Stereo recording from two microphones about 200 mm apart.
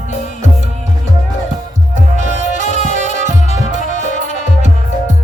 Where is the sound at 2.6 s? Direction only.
35° left (ahead or behind).